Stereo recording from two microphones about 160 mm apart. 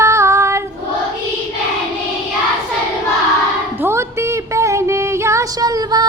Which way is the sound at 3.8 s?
15° right (ahead or behind).